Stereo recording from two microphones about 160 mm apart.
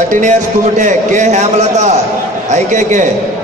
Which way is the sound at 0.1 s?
50° right (ahead or behind).